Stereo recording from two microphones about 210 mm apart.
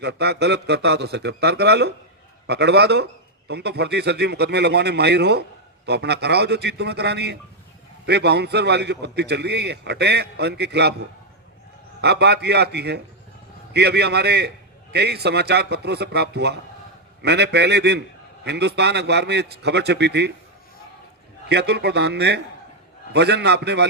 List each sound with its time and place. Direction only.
0.0 s a man's voice: 50° right (ahead or behind)
12.0 s a man's voice: 50° right (ahead or behind)
21.5 s a man's voice: 50° right (ahead or behind)